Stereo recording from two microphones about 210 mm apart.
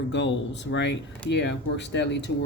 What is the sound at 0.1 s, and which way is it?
Speech, 55° left (ahead or behind).